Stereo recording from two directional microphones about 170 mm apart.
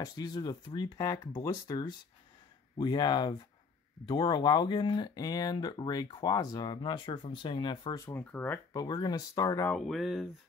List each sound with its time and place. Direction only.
0.0 s speech: 25° left (ahead or behind)
8.7 s speech: 25° left (ahead or behind)
9.7 s speech: centre (ahead or behind)